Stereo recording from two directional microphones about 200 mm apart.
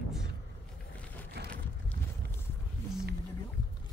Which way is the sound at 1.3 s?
55° right (ahead or behind).